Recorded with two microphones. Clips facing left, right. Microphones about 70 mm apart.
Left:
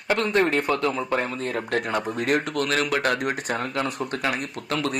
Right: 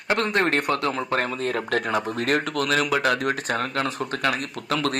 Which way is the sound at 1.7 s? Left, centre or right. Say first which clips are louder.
Left 1 dB; centre.